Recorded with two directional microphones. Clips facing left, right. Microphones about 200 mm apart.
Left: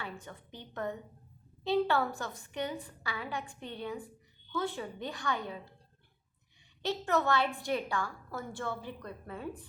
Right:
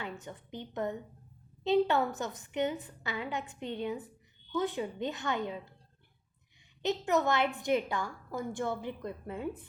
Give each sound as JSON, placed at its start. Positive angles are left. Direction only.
{"t": 0.0, "sound": "a woman's voice", "side_deg": -20}
{"t": 6.8, "sound": "a woman's voice", "side_deg": -15}